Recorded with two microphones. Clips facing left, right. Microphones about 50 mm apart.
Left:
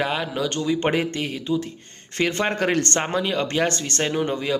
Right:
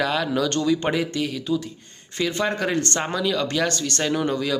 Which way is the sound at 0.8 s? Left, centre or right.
Left.